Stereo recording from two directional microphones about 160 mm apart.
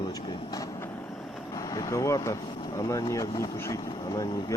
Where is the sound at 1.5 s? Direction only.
20° left (ahead or behind).